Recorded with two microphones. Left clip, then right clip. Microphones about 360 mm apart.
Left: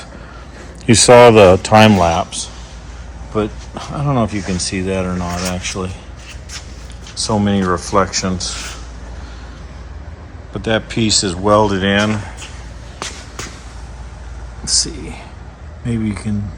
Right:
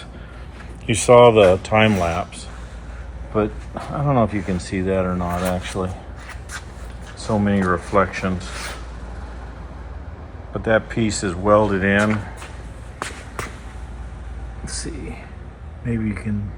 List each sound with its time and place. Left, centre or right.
0.9 s speech: left; by 5.9 s centre
7.3 s speech: centre
10.5 s speech: centre
15.9 s speech: centre